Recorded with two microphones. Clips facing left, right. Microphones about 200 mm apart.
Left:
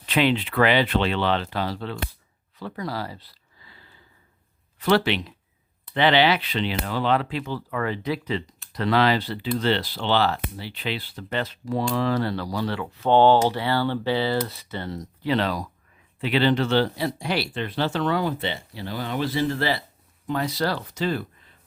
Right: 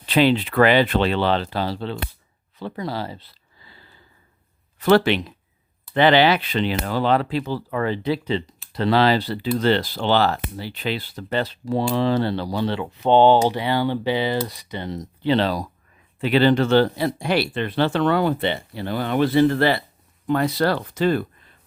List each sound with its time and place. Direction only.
0.0 s speech: 35° right (ahead or behind)
2.6 s a sound: 25° right (ahead or behind)
4.8 s speech: 45° right (ahead or behind); by 15.6 s 30° right (ahead or behind)
16.2 s speech: 45° right (ahead or behind)